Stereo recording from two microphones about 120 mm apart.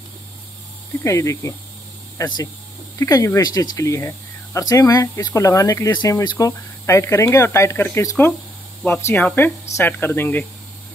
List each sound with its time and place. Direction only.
1.0 s speech: 25° left (ahead or behind)
9.1 s speech: 15° left (ahead or behind)